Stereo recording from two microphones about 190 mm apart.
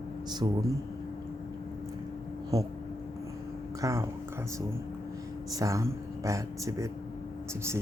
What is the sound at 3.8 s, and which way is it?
Speech, 15° right (ahead or behind).